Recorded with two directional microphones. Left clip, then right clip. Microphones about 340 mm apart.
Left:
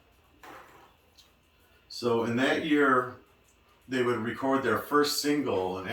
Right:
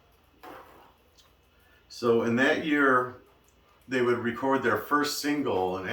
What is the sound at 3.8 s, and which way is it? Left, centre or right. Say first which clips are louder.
Speech: right 2 dB; centre.